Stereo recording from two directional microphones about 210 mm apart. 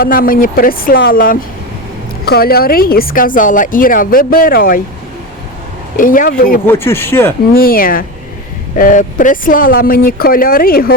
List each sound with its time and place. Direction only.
0.0 s speech: 45° left (ahead or behind)
6.0 s speech: 40° left (ahead or behind)
6.7 s speech: 10° left (ahead or behind)
7.5 s speech: 45° left (ahead or behind)